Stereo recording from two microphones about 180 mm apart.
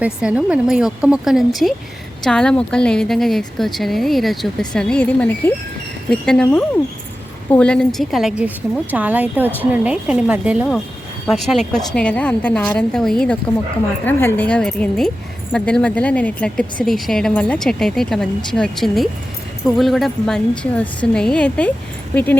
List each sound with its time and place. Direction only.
0.0 s a woman's voice: 5° right (ahead or behind); by 22.4 s 10° left (ahead or behind)